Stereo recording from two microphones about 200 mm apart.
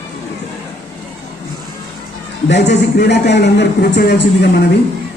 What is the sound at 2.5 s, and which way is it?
A man's voice, 60° left (ahead or behind).